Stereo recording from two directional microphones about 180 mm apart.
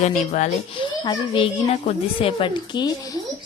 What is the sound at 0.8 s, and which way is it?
A woman's voice, 30° left (ahead or behind).